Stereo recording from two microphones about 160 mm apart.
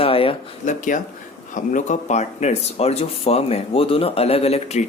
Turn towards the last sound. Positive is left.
turn(degrees=40)  # may be behind; listen again after turning